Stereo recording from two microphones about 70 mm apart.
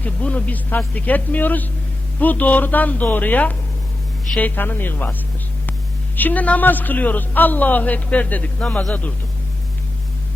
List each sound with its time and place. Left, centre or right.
0.0 s a man's voice: left
6.1 s a man's voice: left